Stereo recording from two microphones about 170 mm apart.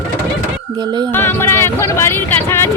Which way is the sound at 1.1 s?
15° left (ahead or behind).